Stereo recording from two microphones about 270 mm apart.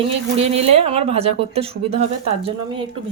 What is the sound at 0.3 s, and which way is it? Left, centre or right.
Speech, right.